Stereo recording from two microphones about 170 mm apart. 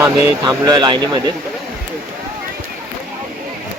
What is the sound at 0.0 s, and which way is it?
Speech, 20° right (ahead or behind).